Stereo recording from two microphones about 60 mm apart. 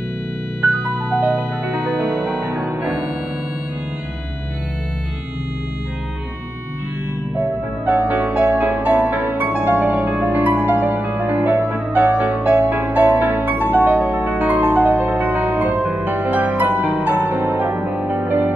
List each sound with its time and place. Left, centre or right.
2.1 s music: centre
7.8 s music: right